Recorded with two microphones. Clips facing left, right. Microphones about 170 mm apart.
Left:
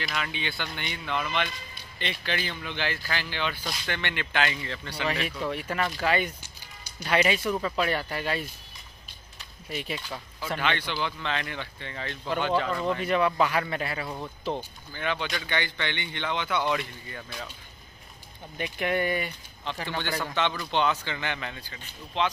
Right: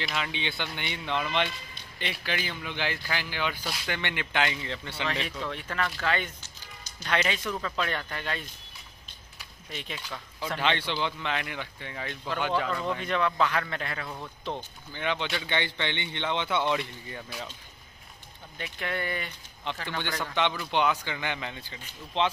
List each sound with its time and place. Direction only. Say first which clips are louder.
0.0 s speech: even; 20° right (ahead or behind)
2.0 s speech: left 1 dB; 10° right (ahead or behind)
5.0 s speech: left 4 dB; 10° left (ahead or behind)
9.7 s speech: left 5 dB; 10° left (ahead or behind)
10.6 s speech: right 1 dB; 25° right (ahead or behind); by 12.6 s 10° right (ahead or behind)
12.6 s speech: left 3 dB; centre (ahead or behind)
14.9 s speech: even; 20° right (ahead or behind)
18.6 s speech: left 6 dB; 15° left (ahead or behind)
20.3 s speech: right 1 dB; 15° right (ahead or behind)